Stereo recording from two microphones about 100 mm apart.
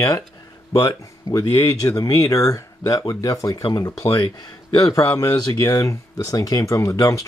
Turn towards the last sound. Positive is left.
turn(degrees=35)  # may be behind; listen again after turning